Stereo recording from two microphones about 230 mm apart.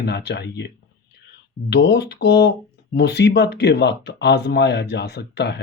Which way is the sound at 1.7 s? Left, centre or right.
Left.